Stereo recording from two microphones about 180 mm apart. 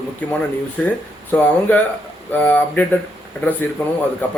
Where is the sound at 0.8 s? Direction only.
10° left (ahead or behind).